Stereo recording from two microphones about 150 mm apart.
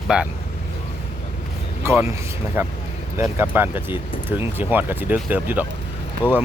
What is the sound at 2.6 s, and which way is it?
Speech, 15° right (ahead or behind).